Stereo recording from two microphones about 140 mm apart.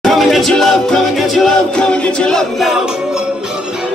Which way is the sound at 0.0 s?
Centre (ahead or behind).